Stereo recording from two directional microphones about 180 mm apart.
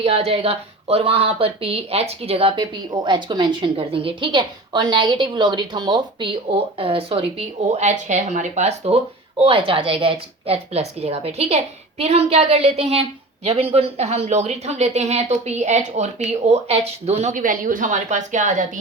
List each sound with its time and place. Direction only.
0.0 s speech: 35° right (ahead or behind)